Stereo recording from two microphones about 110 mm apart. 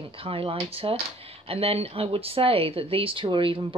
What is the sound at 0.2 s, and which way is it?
Speech, 55° right (ahead or behind).